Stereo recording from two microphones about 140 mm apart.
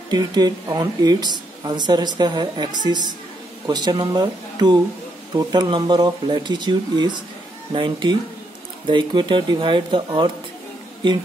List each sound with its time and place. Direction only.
0.1 s speech: 30° right (ahead or behind)